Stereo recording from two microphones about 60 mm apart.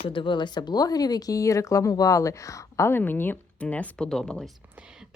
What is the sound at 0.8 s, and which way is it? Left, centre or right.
Speech, left.